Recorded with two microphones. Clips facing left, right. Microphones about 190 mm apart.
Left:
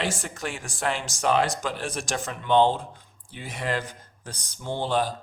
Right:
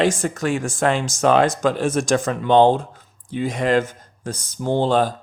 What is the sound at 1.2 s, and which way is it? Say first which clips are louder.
Speech: right 7 dB; 85° right.